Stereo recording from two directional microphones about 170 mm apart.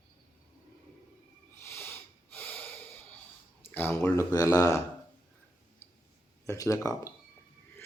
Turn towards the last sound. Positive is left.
turn(degrees=20)  # may be behind; listen again after turning